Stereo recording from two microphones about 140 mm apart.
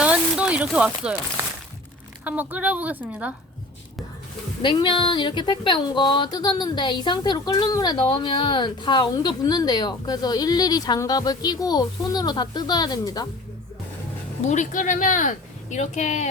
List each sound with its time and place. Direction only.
0.0 s a sound: 10° right (ahead or behind)
2.2 s a woman's voice: 10° right (ahead or behind)
4.6 s speech: 35° left (ahead or behind)
14.4 s a woman's voice: 60° left (ahead or behind)